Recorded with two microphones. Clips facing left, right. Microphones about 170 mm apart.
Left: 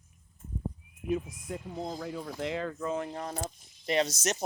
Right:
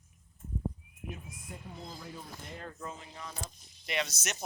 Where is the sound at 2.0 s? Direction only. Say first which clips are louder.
Left 10 dB; 90° left.